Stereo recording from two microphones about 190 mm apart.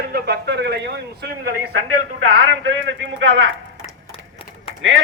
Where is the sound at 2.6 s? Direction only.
75° right (ahead or behind).